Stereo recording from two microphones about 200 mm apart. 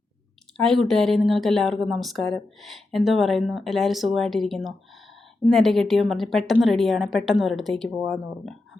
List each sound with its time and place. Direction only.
0.5 s a woman's voice: centre (ahead or behind)